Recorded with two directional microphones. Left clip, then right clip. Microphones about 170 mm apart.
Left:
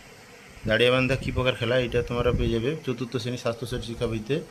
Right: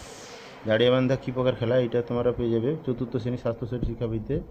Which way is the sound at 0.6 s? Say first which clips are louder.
Even; 5° right (ahead or behind).